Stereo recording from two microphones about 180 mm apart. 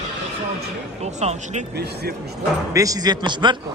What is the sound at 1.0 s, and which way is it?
Speech, 35° right (ahead or behind).